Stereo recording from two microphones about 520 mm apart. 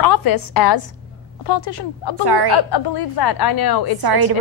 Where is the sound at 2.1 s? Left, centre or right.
Right.